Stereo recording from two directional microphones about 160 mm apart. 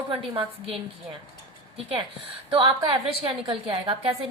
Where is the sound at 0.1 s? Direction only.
35° right (ahead or behind).